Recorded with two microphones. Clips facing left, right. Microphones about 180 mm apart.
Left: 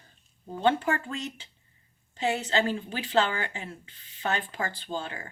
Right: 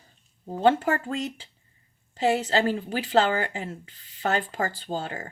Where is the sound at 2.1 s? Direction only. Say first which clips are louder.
Right 4 dB; 40° right (ahead or behind).